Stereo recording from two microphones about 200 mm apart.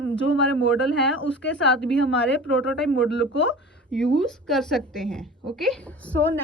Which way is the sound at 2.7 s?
5° left (ahead or behind).